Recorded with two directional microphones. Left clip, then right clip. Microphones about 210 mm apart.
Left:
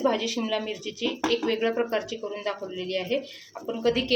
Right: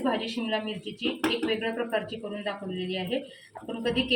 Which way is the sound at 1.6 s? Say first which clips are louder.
Left 3 dB; 55° left (ahead or behind).